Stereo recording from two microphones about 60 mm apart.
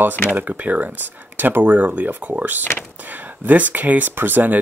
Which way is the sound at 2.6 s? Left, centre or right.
Left.